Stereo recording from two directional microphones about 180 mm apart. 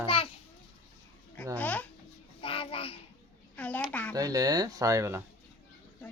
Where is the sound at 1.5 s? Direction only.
10° left (ahead or behind).